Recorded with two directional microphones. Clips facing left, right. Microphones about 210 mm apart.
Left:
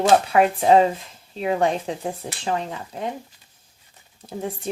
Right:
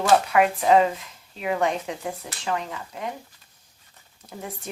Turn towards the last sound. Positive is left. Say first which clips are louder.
# left 7 dB
turn(degrees=30)  # may be behind; listen again after turning